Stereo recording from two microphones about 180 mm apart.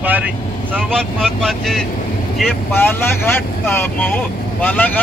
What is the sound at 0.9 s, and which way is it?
Speech, centre (ahead or behind).